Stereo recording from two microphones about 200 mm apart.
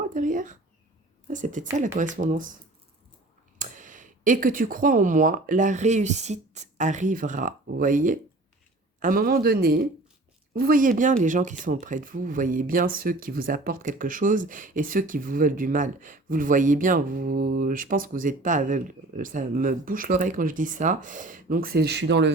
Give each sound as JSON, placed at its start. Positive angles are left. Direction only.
{"t": 0.1, "sound": "a sound", "side_deg": -40}
{"t": 1.3, "sound": "speech", "side_deg": -40}
{"t": 3.6, "sound": "speech", "side_deg": -40}